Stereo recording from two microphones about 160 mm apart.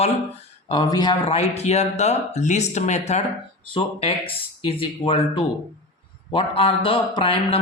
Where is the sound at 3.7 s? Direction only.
35° left (ahead or behind).